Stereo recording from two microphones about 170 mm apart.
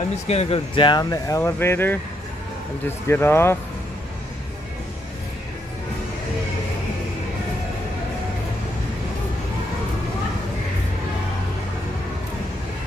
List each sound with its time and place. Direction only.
0.3 s speech: 35° left (ahead or behind); by 2.0 s 15° left (ahead or behind)
3.1 s speech: 15° left (ahead or behind)